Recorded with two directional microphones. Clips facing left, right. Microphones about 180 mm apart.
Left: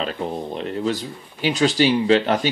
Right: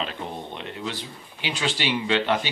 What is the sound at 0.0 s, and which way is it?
A man's voice, 35° left (ahead or behind).